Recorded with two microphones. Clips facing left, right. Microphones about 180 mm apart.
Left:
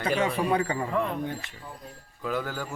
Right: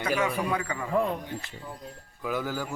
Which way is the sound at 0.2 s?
30° left (ahead or behind).